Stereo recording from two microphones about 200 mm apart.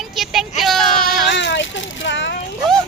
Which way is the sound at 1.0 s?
60° left (ahead or behind).